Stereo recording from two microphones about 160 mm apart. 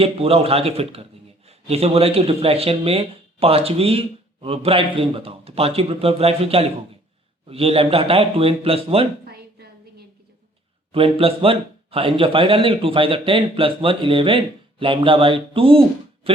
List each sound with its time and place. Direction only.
0.0 s speech: 35° right (ahead or behind)
9.2 s a sound: 75° right (ahead or behind)
10.9 s speech: 35° right (ahead or behind)